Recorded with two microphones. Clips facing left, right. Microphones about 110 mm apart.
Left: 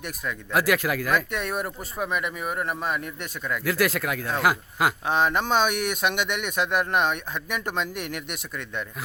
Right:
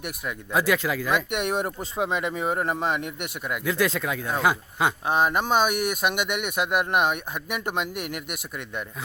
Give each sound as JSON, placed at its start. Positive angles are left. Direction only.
{"t": 0.0, "sound": "speech", "side_deg": -15}
{"t": 3.8, "sound": "speech", "side_deg": 5}
{"t": 4.2, "sound": "speech", "side_deg": -15}